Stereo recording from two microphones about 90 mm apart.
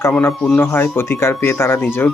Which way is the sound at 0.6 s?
25° left (ahead or behind).